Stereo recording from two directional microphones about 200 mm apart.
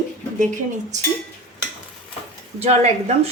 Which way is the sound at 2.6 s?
35° right (ahead or behind).